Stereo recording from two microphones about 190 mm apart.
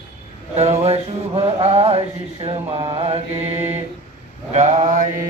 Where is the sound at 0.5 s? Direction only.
35° right (ahead or behind).